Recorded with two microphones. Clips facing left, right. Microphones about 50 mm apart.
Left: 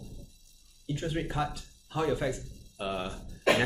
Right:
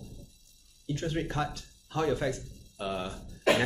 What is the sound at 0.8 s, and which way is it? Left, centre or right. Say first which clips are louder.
Speech: right 1 dB; centre.